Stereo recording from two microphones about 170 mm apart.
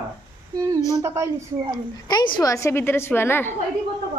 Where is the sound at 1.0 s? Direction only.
20° right (ahead or behind).